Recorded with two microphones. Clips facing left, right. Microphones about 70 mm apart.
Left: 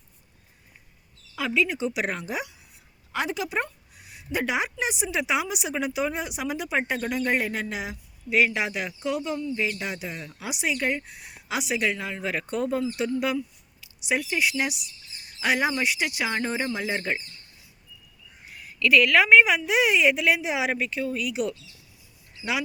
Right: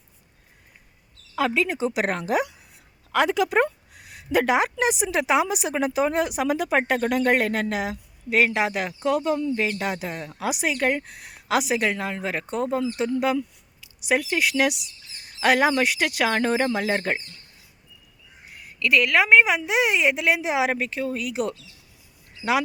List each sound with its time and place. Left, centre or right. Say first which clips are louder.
1.4 s speech: right 3 dB; right
3.1 s speech: right 8 dB; right
4.1 s a sound: right 7 dB; right
4.5 s speech: right 6 dB; right
14.1 s speech: right 3 dB; right
18.9 s a woman's voice: even; centre; by 21.5 s right